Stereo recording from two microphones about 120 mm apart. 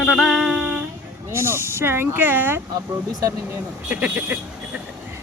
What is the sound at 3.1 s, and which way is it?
Speech, 30° right (ahead or behind).